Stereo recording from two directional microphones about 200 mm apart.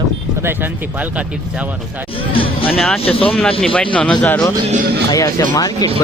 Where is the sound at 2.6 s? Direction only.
5° left (ahead or behind).